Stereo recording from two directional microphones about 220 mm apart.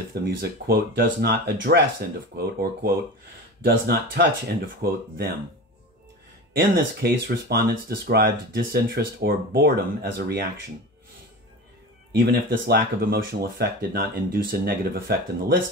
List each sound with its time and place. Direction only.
0.1 s speech: 45° right (ahead or behind)
6.7 s speech: 45° right (ahead or behind)
12.1 s speech: 50° right (ahead or behind)